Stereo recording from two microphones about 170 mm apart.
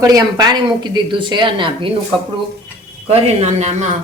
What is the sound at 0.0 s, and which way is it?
A woman's voice, 20° right (ahead or behind).